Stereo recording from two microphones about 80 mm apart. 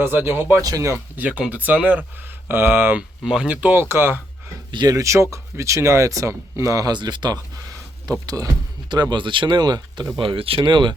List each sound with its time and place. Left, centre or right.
0.0 s speech: right
0.6 s speech: right
1.1 s speech: centre
3.2 s speech: centre; by 4.2 s right
4.9 s speech: right
6.9 s speech: right
8.9 s speech: right
10.2 s speech: right